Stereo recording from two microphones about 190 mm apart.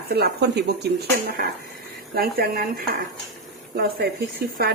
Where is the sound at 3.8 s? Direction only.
55° right (ahead or behind).